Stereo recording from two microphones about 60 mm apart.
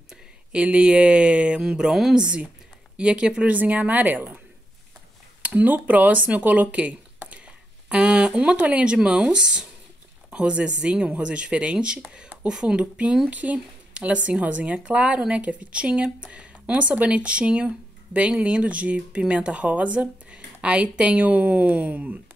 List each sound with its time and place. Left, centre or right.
0.1 s speech: centre
1.6 s speech: centre
2.2 s speech: centre
3.5 s speech: right
5.4 s speech: right